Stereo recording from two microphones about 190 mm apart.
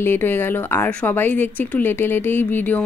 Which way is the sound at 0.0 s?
10° left (ahead or behind).